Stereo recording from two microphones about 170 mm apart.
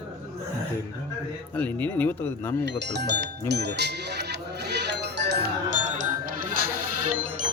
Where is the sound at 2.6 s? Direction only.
85° right.